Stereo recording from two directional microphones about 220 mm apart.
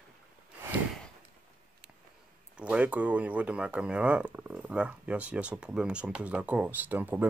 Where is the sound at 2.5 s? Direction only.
5° right (ahead or behind).